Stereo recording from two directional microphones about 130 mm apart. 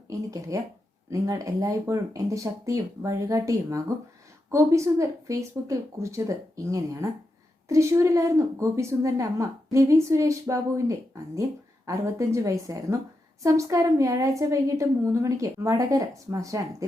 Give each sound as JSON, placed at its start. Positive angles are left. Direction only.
{"t": 0.1, "sound": "a woman's voice", "side_deg": -25}